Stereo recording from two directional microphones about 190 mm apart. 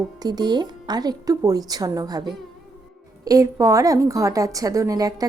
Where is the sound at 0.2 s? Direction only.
20° right (ahead or behind).